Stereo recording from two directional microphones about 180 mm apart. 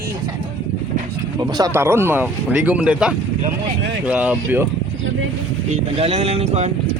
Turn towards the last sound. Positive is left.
turn(degrees=-35)  # may be behind; listen again after turning